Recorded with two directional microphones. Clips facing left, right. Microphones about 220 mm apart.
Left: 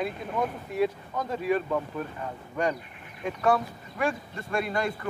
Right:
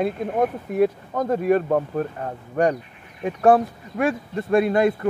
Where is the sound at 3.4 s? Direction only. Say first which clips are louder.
Right 9 dB; 55° right (ahead or behind).